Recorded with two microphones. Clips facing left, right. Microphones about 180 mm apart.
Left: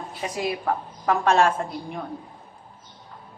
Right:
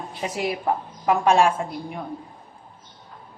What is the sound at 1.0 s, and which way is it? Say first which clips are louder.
Speech: right 2 dB; 10° right (ahead or behind).